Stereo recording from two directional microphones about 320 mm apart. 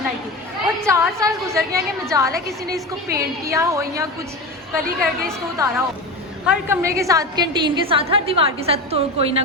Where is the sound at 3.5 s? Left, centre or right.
Centre.